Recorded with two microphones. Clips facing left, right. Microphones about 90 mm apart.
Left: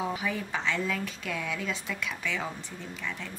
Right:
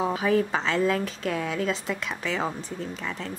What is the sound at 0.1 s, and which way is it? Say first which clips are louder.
Speech: right 9 dB; 40° right (ahead or behind).